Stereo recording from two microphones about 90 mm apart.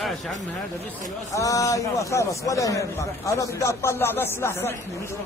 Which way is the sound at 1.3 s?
40° left (ahead or behind).